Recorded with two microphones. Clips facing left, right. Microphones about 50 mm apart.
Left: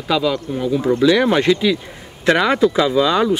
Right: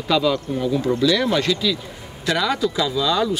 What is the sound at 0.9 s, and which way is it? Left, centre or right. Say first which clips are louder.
Speech: left 6 dB; left.